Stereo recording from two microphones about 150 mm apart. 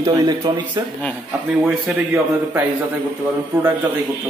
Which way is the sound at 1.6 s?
10° right (ahead or behind).